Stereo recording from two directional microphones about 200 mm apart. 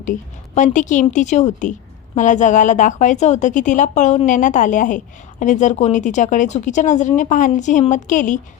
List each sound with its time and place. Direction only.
0.0 s a woman's voice: 40° left (ahead or behind)